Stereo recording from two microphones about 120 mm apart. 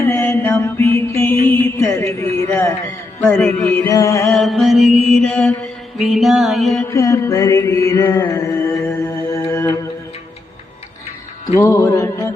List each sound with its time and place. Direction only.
0.1 s mantra: 20° left (ahead or behind)
3.3 s mantra: 10° left (ahead or behind); by 4.3 s 25° left (ahead or behind)
4.3 s mantra: centre (ahead or behind)
6.9 s mantra: 25° left (ahead or behind)
8.9 s music: 15° left (ahead or behind)
11.6 s mantra: 25° left (ahead or behind)